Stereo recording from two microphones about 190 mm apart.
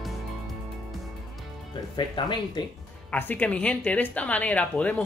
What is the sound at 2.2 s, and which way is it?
Speech, 25° left (ahead or behind).